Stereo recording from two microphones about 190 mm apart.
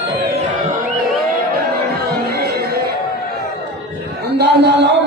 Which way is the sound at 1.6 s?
55° right (ahead or behind).